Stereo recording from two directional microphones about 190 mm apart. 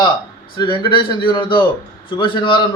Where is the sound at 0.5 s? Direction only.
25° left (ahead or behind).